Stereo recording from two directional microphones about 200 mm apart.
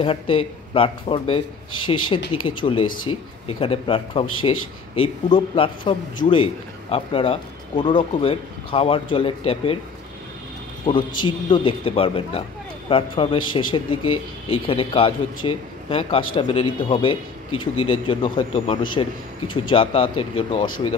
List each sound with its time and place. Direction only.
0.0 s a man's voice: 25° left (ahead or behind)
10.9 s a man's voice: 25° left (ahead or behind)